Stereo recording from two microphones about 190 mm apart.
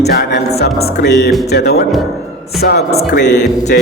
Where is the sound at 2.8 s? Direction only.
35° left (ahead or behind).